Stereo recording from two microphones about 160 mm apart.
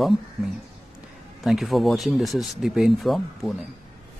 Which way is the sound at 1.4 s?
Centre (ahead or behind).